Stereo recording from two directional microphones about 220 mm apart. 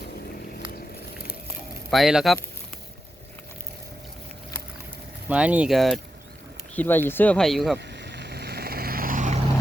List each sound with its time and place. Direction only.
1.9 s speech: centre (ahead or behind)
5.3 s speech: 5° right (ahead or behind)
7.8 s vehicle: 50° right (ahead or behind); by 9.4 s 35° right (ahead or behind)